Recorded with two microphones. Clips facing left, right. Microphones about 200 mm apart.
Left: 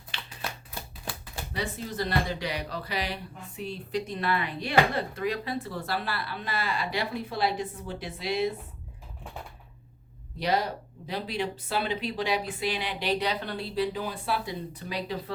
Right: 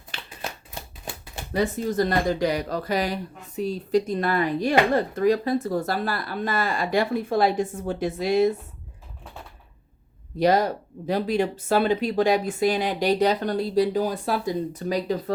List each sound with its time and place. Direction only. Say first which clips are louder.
0.1 s a sound: right 2 dB; 45° right (ahead or behind)
1.5 s speech: right 10 dB; 45° right (ahead or behind)
10.3 s speech: right 8 dB; 45° right (ahead or behind)